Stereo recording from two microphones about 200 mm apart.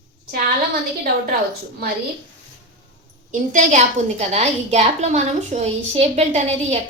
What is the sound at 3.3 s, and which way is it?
A woman's voice, 40° right (ahead or behind).